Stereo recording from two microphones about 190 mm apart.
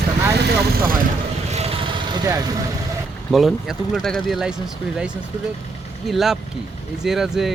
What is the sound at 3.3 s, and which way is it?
Speech, centre (ahead or behind).